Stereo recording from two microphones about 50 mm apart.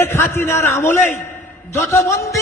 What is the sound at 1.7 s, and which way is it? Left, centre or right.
Speech, left.